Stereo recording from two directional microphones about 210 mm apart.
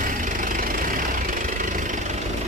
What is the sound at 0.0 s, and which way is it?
Vehicle, 40° right (ahead or behind).